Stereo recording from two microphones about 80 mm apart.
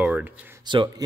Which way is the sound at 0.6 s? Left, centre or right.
Right.